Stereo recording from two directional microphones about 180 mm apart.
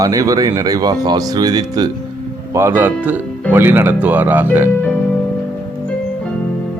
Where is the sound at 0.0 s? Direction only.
20° right (ahead or behind).